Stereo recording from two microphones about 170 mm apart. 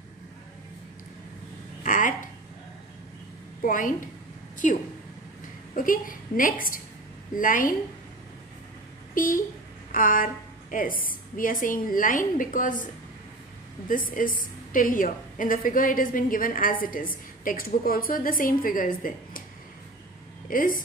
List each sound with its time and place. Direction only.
1.8 s speech: 50° left (ahead or behind)
3.6 s a woman's voice: 50° left (ahead or behind)
9.1 s a woman's voice: 55° left (ahead or behind)
13.8 s a woman's voice: 55° left (ahead or behind)
20.4 s speech: 55° left (ahead or behind)